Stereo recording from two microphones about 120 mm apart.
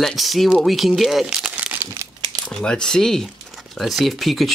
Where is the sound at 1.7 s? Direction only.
25° right (ahead or behind).